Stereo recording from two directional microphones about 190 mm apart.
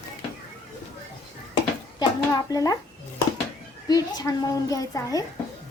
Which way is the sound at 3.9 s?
20° left (ahead or behind).